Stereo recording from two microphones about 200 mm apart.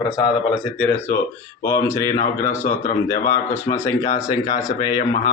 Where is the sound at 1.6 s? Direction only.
10° left (ahead or behind).